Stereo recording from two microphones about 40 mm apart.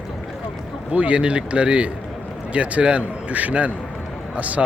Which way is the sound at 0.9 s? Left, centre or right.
Right.